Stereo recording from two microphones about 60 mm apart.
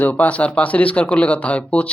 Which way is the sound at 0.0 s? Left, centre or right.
Left.